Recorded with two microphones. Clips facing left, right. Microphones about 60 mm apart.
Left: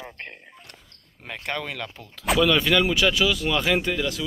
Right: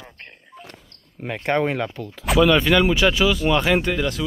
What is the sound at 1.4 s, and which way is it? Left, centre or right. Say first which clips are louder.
Speech: right 10 dB; right.